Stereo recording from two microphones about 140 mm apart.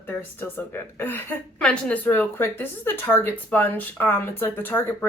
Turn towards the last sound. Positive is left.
turn(degrees=15)  # may be behind; listen again after turning